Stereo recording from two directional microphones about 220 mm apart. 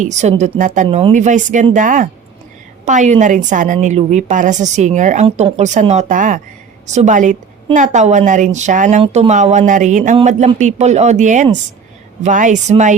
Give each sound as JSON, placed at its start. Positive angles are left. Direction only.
{"t": 0.0, "sound": "a woman's voice", "side_deg": -30}